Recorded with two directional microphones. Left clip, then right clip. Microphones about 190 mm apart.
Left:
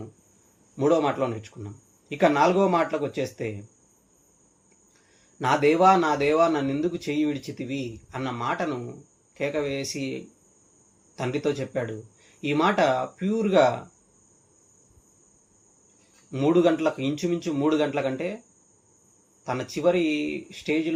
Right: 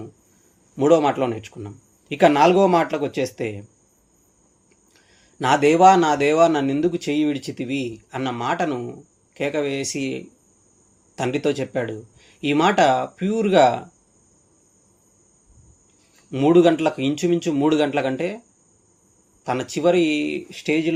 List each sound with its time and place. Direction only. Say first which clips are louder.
0.8 s a man's voice: right 5 dB; 45° right (ahead or behind)
5.4 s a man's voice: right 5 dB; 45° right (ahead or behind)
16.3 s a man's voice: right 6 dB; 45° right (ahead or behind)
19.5 s a man's voice: right 4 dB; 45° right (ahead or behind)